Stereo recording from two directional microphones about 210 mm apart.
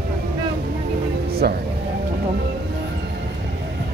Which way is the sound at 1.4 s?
50° right (ahead or behind).